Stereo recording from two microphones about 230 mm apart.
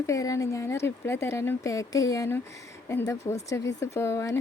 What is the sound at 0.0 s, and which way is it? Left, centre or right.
Speech, centre.